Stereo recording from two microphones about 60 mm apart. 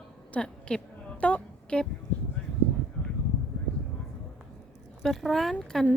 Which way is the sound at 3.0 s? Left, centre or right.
Left.